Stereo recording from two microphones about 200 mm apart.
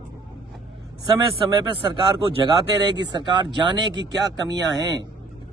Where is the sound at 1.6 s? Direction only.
25° right (ahead or behind).